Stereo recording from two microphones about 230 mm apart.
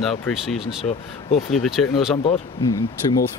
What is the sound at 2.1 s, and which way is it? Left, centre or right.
Speech, left.